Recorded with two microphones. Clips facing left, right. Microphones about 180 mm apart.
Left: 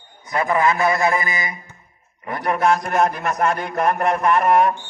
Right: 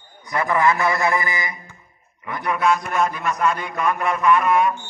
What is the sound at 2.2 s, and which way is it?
A man's voice, 45° left (ahead or behind).